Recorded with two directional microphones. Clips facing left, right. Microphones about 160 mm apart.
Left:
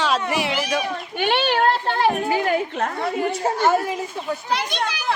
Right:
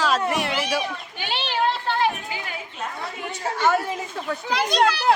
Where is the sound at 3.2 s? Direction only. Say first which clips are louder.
Left 8 dB; 40° left (ahead or behind).